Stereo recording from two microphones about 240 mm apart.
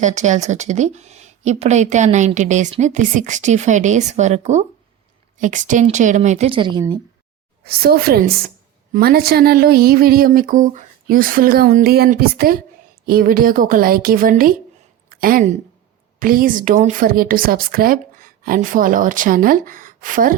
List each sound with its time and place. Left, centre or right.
0.0 s speech: right
7.6 s speech: right